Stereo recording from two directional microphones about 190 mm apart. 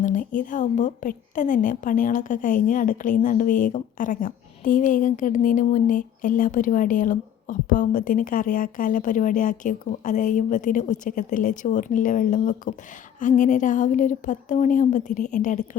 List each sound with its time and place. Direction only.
0.0 s a woman's voice: 45° left (ahead or behind)